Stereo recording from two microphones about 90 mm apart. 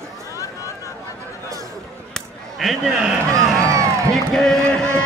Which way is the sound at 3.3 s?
35° right (ahead or behind).